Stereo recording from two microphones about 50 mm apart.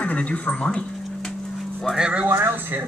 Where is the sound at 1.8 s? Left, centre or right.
Centre.